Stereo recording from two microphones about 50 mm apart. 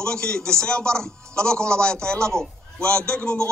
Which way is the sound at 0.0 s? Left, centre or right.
Centre.